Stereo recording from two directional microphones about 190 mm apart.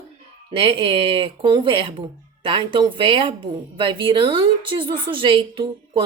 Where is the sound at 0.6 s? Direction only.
25° right (ahead or behind).